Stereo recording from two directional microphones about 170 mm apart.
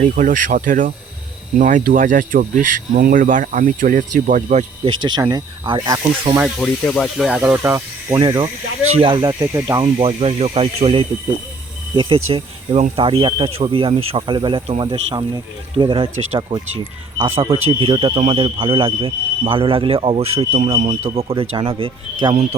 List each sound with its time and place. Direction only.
0.0 s speech: 50° right (ahead or behind)
4.9 s speech: 25° right (ahead or behind)
6.3 s speech: 5° right (ahead or behind)
9.8 s speech: 35° right (ahead or behind)